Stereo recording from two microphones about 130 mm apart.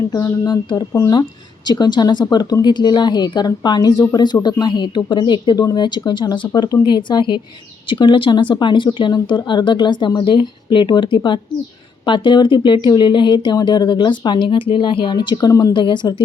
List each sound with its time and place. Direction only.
0.1 s speech: 30° left (ahead or behind)